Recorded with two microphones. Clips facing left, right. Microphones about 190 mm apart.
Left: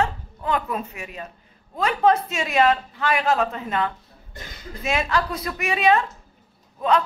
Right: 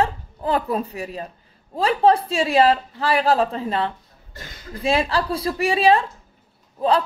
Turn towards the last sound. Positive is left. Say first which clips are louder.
# right 2 dB
turn(degrees=-35)  # may be behind; listen again after turning